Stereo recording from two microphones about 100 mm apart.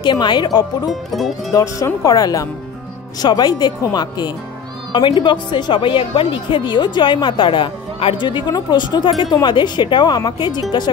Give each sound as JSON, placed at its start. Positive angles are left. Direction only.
{"t": 0.0, "sound": "speech", "side_deg": 50}
{"t": 0.8, "sound": "speech", "side_deg": 0}
{"t": 1.5, "sound": "speech", "side_deg": 35}